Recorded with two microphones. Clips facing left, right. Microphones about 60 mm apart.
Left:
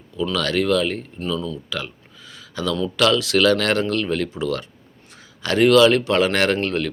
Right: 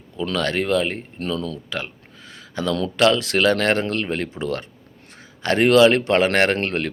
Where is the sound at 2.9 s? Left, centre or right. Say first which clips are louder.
Even; right.